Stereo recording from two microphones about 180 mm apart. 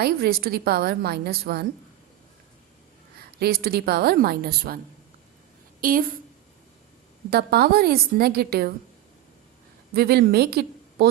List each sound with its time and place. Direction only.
0.0 s a woman's voice: 60° right (ahead or behind)
3.3 s a woman's voice: 60° right (ahead or behind)
5.8 s a woman's voice: 50° right (ahead or behind)
7.3 s a woman's voice: 60° right (ahead or behind)
9.9 s a woman's voice: 60° right (ahead or behind)